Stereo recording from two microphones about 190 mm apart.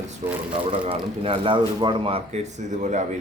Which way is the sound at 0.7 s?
30° right (ahead or behind).